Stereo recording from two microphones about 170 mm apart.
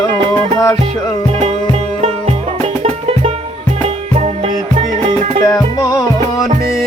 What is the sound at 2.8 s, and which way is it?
Music, 35° right (ahead or behind).